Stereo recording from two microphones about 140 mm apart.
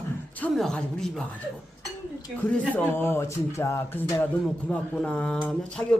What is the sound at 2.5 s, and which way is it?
Speech, 15° left (ahead or behind).